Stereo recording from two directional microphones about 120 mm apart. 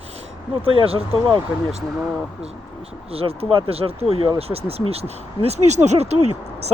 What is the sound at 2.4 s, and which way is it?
Speech, 60° right (ahead or behind).